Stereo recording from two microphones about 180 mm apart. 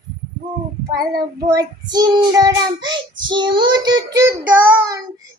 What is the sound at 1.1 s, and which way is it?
Child singing, 20° right (ahead or behind).